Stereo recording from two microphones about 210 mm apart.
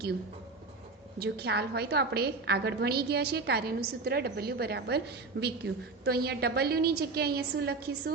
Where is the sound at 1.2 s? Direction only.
50° right (ahead or behind).